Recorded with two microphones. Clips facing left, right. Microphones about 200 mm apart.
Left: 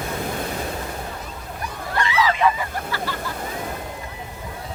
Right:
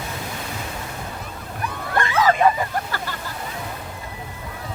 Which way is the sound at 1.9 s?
50° right (ahead or behind).